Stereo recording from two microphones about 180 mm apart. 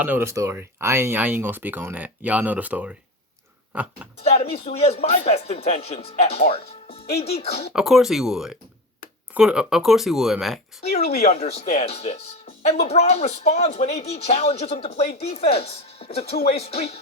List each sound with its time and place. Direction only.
0.0 s speech: 10° right (ahead or behind)
4.2 s speech: 35° left (ahead or behind)
7.7 s speech: centre (ahead or behind)
10.8 s speech: 35° left (ahead or behind)